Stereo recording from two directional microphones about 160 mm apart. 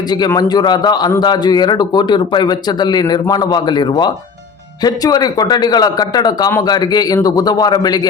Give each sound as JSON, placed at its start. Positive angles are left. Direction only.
{"t": 0.3, "sound": "a man's voice", "side_deg": 25}